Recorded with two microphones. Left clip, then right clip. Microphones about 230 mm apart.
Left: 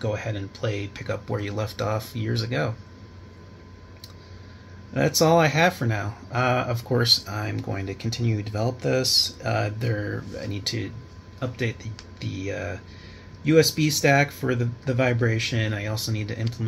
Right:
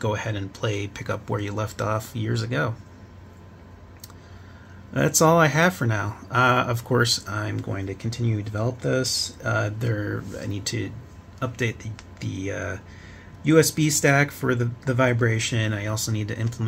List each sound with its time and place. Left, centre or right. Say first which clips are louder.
0.0 s speech: right 2 dB; right
4.9 s speech: right 1 dB; right